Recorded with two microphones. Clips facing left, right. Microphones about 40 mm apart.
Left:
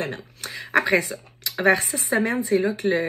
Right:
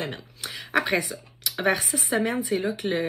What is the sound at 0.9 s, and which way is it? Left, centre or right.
Speech, left.